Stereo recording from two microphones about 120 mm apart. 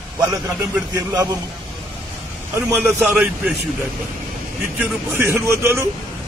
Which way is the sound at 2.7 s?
20° right (ahead or behind).